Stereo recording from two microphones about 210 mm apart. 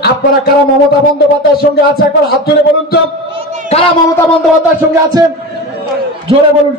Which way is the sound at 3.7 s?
30° left (ahead or behind).